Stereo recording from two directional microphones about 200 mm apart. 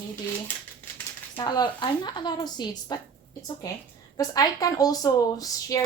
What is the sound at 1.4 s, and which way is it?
A woman's voice, 20° left (ahead or behind).